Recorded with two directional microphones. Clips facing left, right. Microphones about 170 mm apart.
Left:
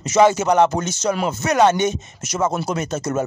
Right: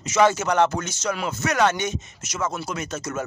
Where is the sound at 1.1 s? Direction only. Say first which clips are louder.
Left 4 dB; 35° left (ahead or behind).